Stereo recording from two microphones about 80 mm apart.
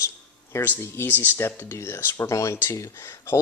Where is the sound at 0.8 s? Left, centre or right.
Left.